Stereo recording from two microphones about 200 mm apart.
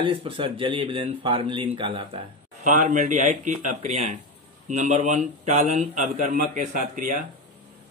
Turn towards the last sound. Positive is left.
turn(degrees=-40)  # may be behind; listen again after turning